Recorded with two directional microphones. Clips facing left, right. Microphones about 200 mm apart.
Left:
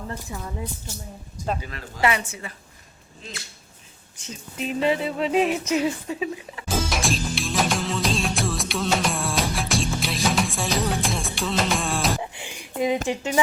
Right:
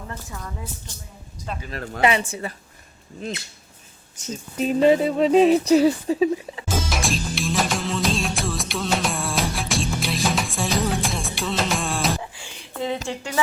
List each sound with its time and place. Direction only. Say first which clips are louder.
0.1 s a woman's voice: left 2 dB; 25° left (ahead or behind)
1.4 s speech: left 6 dB; 50° left (ahead or behind)
2.0 s a woman's voice: right 3 dB; 20° right (ahead or behind)
2.2 s speech: right 7 dB; 35° right (ahead or behind)
4.2 s speech: right 6 dB; 40° right (ahead or behind)
6.7 s music: even; centre (ahead or behind)
12.2 s a sound: left 3 dB; 15° left (ahead or behind)
13.1 s speech: left 4 dB; 15° left (ahead or behind)